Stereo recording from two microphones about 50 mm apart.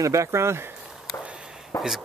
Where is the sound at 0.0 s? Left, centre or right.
Right.